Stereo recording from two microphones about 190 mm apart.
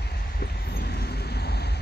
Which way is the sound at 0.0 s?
55° left (ahead or behind).